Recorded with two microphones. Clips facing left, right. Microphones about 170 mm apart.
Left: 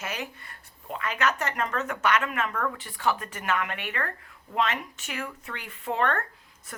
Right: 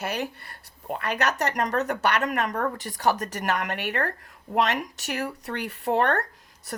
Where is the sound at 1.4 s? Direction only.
40° right (ahead or behind).